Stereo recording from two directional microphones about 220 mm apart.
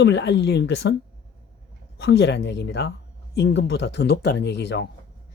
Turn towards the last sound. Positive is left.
turn(degrees=50)  # may be behind; listen again after turning